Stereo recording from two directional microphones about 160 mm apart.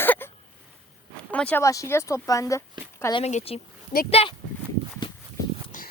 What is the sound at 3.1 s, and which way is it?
Speech, 40° left (ahead or behind).